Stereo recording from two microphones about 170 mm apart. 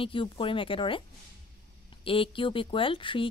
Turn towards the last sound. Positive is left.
turn(degrees=30)  # may be behind; listen again after turning